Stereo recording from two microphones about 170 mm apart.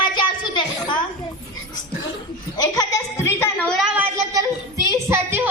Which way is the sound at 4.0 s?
20° right (ahead or behind).